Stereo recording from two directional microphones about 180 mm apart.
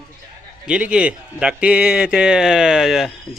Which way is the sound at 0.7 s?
5° right (ahead or behind).